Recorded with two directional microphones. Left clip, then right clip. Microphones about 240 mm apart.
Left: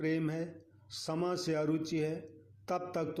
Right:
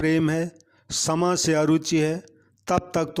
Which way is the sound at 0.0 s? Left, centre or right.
Right.